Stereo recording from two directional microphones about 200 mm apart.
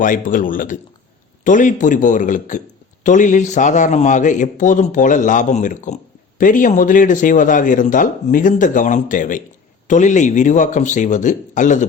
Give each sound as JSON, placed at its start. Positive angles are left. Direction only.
{"t": 0.0, "sound": "speech", "side_deg": 40}